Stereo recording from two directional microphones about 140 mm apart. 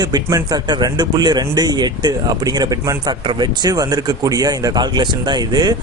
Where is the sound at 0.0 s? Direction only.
25° right (ahead or behind).